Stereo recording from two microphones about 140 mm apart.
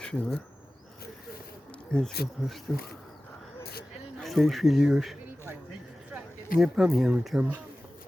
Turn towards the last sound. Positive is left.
turn(degrees=-5)  # may be behind; listen again after turning